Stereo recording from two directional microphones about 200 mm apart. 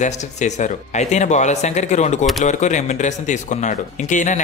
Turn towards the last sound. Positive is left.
turn(degrees=40)  # may be behind; listen again after turning